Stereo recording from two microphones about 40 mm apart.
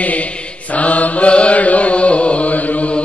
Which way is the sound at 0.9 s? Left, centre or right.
Left.